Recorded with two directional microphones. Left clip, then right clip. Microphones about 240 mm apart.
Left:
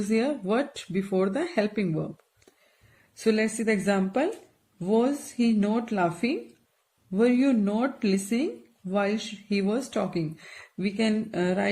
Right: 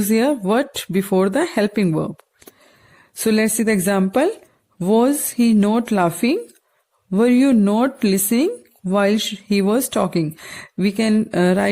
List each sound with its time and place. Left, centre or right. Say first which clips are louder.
0.1 s speech: right 8 dB; right